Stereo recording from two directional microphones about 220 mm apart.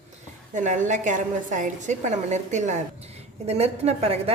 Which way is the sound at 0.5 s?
35° right (ahead or behind).